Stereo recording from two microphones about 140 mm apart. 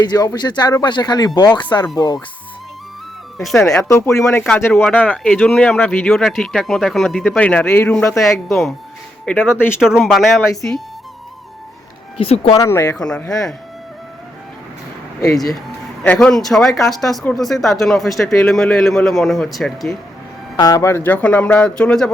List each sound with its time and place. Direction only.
0.0 s speech: 30° left (ahead or behind)
3.6 s speech: 20° left (ahead or behind)
9.2 s speech: 10° left (ahead or behind)
9.8 s speech: 5° right (ahead or behind)
12.2 s speech: 45° left (ahead or behind)
12.5 s speech: 20° left (ahead or behind)
13.0 s speech: 5° left (ahead or behind)
15.3 s speech: centre (ahead or behind)
20.6 s speech: 25° left (ahead or behind); by 22.1 s 5° left (ahead or behind)